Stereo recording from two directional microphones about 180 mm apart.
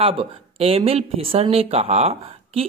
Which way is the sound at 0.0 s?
30° right (ahead or behind).